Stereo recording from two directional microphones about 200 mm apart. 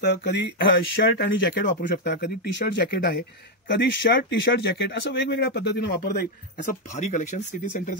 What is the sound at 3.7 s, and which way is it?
Speech, 65° left (ahead or behind).